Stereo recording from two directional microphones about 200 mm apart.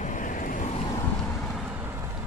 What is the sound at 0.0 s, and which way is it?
Vehicle, 40° left (ahead or behind).